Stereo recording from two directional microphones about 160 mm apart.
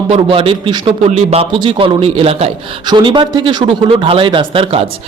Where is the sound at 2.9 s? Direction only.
30° right (ahead or behind).